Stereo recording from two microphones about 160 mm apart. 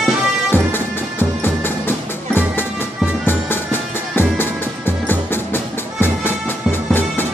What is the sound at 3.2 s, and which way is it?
Music, 15° left (ahead or behind).